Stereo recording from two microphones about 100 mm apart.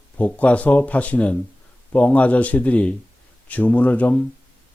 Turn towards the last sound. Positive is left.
turn(degrees=15)  # may be behind; listen again after turning